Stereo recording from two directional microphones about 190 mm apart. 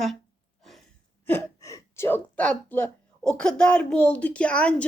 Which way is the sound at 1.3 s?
15° left (ahead or behind).